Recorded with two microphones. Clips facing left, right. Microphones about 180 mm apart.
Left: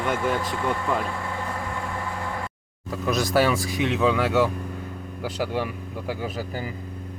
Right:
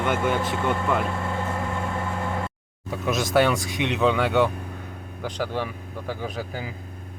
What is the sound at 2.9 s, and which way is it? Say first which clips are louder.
Speech: left 1 dB; centre (ahead or behind).